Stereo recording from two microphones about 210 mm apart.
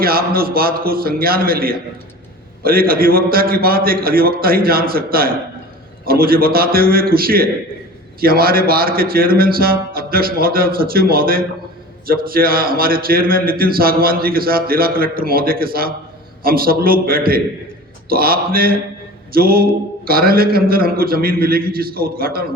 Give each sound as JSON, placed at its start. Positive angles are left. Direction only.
{"t": 0.0, "sound": "speech", "side_deg": -45}